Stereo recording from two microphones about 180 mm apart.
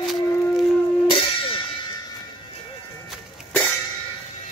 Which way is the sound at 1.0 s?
30° left (ahead or behind).